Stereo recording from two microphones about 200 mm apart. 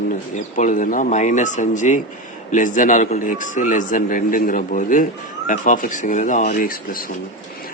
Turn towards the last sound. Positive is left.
turn(degrees=45)  # may be behind; listen again after turning